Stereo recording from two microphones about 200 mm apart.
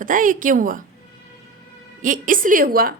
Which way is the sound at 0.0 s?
40° right (ahead or behind).